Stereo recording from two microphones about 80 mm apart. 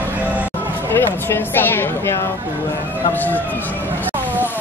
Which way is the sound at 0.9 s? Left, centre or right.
Left.